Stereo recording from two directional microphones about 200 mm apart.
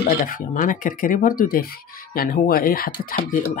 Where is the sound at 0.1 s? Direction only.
45° left (ahead or behind).